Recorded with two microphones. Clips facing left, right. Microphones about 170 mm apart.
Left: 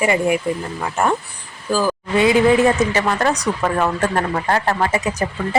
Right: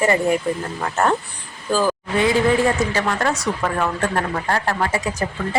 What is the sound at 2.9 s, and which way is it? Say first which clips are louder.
Speech: left 3 dB; 15° left (ahead or behind).